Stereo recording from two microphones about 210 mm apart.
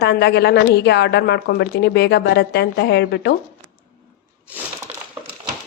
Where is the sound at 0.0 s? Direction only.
50° left (ahead or behind).